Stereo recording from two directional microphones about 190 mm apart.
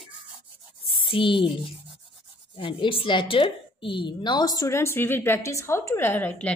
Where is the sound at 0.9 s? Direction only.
25° left (ahead or behind).